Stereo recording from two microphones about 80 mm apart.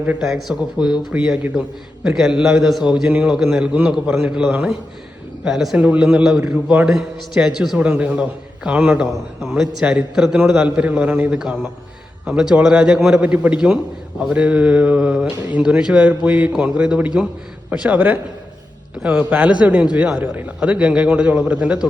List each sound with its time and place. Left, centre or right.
0.2 s a man's voice: centre
7.8 s speech: centre
9.4 s a man's voice: centre